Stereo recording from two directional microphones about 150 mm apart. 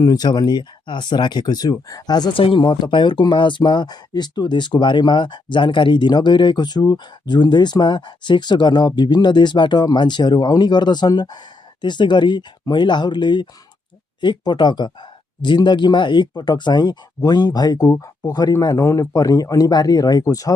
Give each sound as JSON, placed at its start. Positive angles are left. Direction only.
{"t": 0.0, "sound": "speech", "side_deg": 25}